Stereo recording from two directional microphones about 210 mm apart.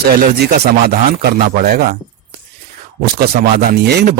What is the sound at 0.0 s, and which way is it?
Speech, 50° right (ahead or behind).